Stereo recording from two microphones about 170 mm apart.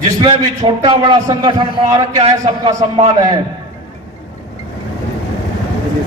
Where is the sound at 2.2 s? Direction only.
35° right (ahead or behind).